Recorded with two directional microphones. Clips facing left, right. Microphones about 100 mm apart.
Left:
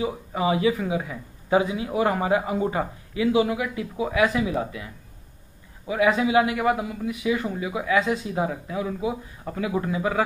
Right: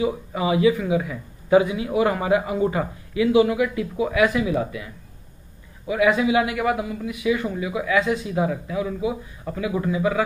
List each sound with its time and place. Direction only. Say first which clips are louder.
0.0 s a man's voice: right 2 dB; 35° left (ahead or behind)
5.9 s a man's voice: right 2 dB; 30° left (ahead or behind)